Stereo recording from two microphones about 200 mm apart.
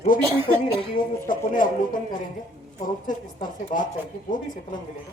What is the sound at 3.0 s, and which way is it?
Speech, 40° left (ahead or behind).